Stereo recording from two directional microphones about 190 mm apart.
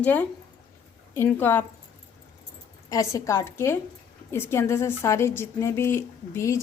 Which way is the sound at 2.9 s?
15° left (ahead or behind).